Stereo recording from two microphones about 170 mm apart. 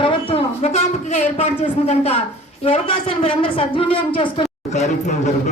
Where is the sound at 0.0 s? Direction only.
30° left (ahead or behind).